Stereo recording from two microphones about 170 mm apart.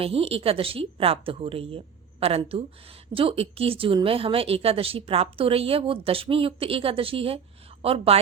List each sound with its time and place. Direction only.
0.0 s a woman's voice: 35° right (ahead or behind)